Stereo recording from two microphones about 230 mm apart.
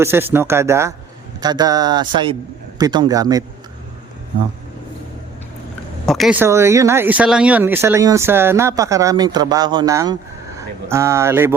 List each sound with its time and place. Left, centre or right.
0.0 s speech: centre
6.1 s speech: centre